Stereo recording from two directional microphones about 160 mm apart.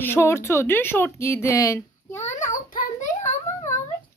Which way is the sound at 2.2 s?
50° left (ahead or behind).